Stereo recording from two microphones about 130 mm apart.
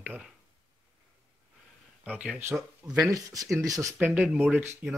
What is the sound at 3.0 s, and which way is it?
Speech, 25° right (ahead or behind).